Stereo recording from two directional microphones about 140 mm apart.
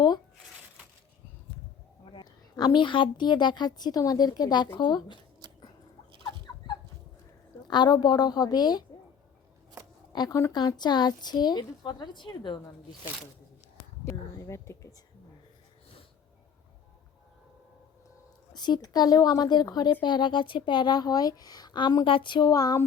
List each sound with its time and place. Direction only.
2.1 s speech: 30° left (ahead or behind)
5.4 s chewing: 30° right (ahead or behind)
7.7 s speech: 30° left (ahead or behind)
10.1 s speech: 25° left (ahead or behind)
14.0 s a sound: 20° left (ahead or behind)
18.5 s speech: 30° left (ahead or behind)